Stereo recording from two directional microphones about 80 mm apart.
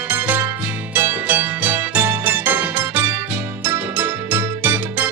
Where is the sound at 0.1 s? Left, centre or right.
Right.